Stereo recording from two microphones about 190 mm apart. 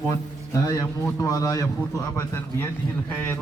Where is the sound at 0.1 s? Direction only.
15° left (ahead or behind).